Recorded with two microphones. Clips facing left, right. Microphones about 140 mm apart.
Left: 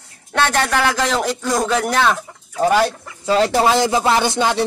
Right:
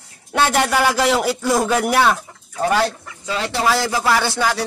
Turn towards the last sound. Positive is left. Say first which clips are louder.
# left 3 dB
turn(degrees=20)  # may be behind; listen again after turning